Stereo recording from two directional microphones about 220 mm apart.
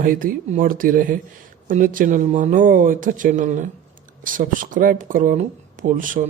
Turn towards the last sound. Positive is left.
turn(degrees=-35)  # may be behind; listen again after turning